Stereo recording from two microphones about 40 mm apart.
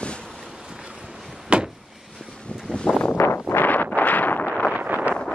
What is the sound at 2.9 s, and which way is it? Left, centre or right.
Wind noise, left.